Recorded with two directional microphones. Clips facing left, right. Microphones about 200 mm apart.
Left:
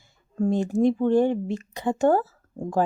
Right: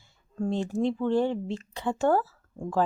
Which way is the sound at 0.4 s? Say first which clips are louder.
Left 6 dB; 15° left (ahead or behind).